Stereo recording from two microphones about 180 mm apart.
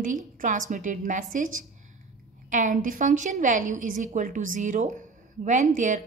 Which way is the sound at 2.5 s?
45° right (ahead or behind).